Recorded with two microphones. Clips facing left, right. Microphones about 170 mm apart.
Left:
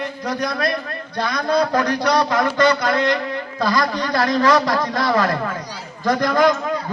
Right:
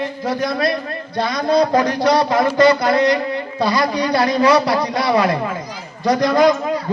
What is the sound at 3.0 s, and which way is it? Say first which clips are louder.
Speech: right 4 dB; centre (ahead or behind).